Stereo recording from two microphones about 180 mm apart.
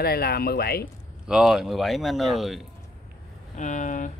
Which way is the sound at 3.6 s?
45° left (ahead or behind).